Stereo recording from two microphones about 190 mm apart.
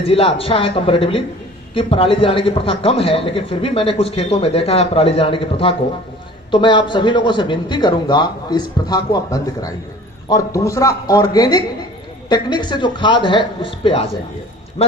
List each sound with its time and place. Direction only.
0.0 s a man's voice: 30° left (ahead or behind)